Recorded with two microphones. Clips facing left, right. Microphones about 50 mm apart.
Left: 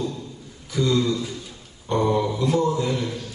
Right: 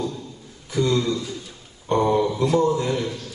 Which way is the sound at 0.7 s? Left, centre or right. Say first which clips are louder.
Even; right.